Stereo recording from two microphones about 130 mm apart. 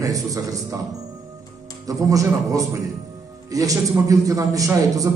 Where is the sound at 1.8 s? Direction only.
25° right (ahead or behind).